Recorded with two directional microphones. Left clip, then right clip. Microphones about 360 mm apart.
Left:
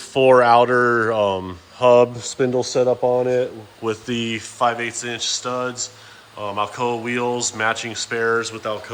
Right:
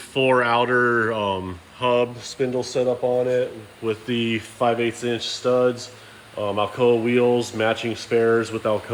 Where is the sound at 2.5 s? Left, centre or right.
Left.